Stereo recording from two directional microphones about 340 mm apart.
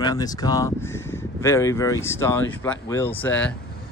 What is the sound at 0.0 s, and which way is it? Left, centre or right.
Speech, centre.